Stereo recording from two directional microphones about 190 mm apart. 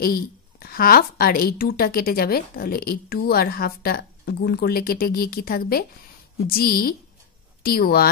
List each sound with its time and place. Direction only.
0.0 s speech: 50° left (ahead or behind)